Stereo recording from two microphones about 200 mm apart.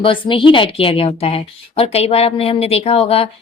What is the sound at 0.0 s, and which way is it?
A woman's voice, 25° left (ahead or behind).